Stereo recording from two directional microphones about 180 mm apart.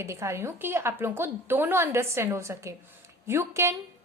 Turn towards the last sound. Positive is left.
turn(degrees=-15)  # may be behind; listen again after turning